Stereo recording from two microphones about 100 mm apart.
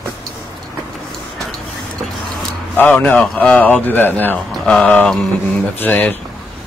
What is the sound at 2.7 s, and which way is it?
Speech, 15° left (ahead or behind).